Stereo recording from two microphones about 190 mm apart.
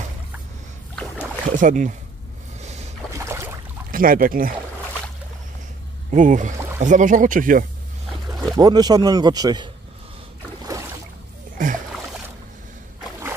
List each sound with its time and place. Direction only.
1.6 s speech: 40° right (ahead or behind)
3.1 s boat: 15° right (ahead or behind)
3.9 s speech: 45° right (ahead or behind)
6.0 s speech: 40° right (ahead or behind)
8.5 s a man's voice: 20° right (ahead or behind)
11.6 s a sound: 45° right (ahead or behind)